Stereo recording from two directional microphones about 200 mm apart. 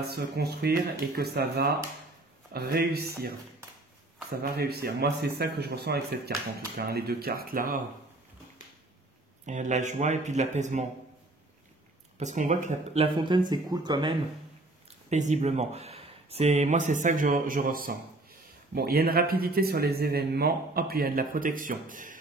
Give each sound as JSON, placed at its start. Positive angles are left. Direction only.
{"t": 0.0, "sound": "a man's voice", "side_deg": -55}
{"t": 4.4, "sound": "a man's voice", "side_deg": -50}
{"t": 9.5, "sound": "speech", "side_deg": -35}
{"t": 12.2, "sound": "speech", "side_deg": -35}
{"t": 15.0, "sound": "a man's voice", "side_deg": -35}